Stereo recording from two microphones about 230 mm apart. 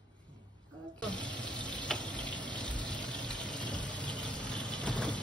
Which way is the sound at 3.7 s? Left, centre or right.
Centre.